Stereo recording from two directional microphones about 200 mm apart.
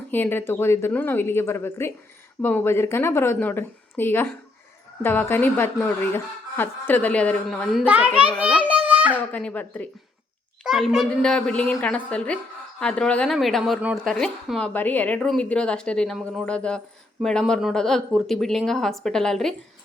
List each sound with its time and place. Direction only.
0.1 s a woman's voice: 10° left (ahead or behind); by 8.8 s 5° right (ahead or behind)
8.9 s a sound: 10° right (ahead or behind)
9.3 s a woman's voice: 5° left (ahead or behind)